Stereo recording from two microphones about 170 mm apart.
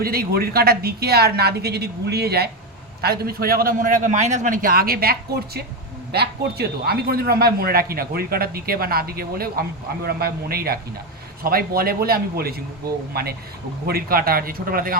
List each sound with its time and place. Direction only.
0.0 s a woman's voice: 60° right (ahead or behind)
13.8 s speech: 60° right (ahead or behind)